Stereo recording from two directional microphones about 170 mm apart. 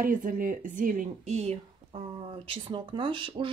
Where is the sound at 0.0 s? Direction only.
50° right (ahead or behind).